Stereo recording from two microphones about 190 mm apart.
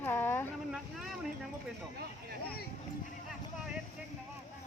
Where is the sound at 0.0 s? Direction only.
10° left (ahead or behind).